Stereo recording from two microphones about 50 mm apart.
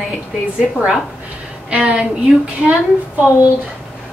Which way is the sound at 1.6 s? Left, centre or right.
Right.